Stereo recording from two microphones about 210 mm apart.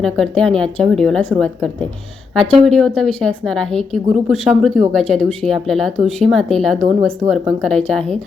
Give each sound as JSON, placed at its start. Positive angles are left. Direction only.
{"t": 0.0, "sound": "a woman's voice", "side_deg": 0}